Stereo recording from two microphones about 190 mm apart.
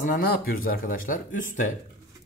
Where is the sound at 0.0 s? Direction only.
50° left (ahead or behind).